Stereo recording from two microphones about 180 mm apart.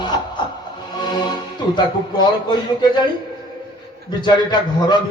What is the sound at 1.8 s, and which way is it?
A man's voice, 25° left (ahead or behind).